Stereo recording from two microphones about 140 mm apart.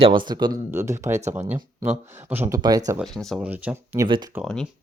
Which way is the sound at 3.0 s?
Centre (ahead or behind).